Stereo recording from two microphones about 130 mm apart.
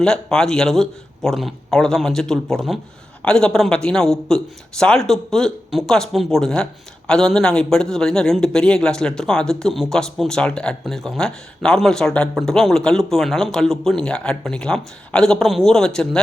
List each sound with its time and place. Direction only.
0.0 s a man's voice: 5° left (ahead or behind)